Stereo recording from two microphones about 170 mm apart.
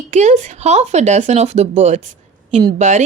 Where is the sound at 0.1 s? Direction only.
45° right (ahead or behind).